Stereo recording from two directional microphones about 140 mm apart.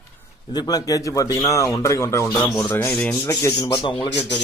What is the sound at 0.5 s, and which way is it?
Speech, 30° left (ahead or behind).